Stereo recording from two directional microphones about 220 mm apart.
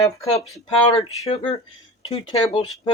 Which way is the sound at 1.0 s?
30° left (ahead or behind).